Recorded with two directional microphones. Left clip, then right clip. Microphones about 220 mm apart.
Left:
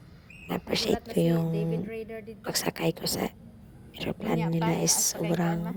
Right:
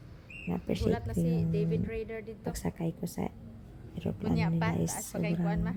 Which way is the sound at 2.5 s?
45° left (ahead or behind).